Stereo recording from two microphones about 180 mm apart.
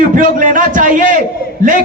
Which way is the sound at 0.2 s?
50° right (ahead or behind).